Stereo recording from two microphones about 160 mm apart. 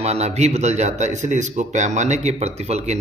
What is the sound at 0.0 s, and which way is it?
A man's voice, 40° right (ahead or behind).